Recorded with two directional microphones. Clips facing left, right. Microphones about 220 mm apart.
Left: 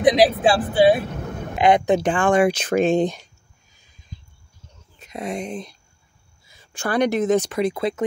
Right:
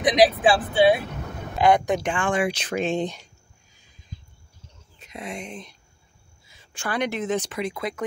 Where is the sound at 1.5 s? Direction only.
20° left (ahead or behind); by 3.3 s 45° left (ahead or behind).